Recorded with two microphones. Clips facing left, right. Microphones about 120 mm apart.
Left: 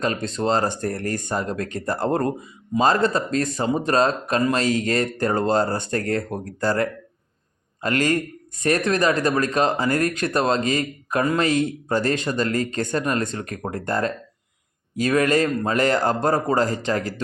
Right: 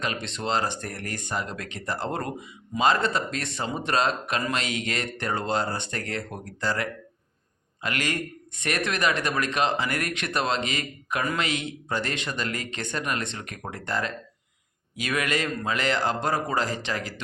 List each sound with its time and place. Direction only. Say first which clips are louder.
0.0 s speech: left 7 dB; 40° left (ahead or behind)
2.0 s speech: left 8 dB; 30° left (ahead or behind)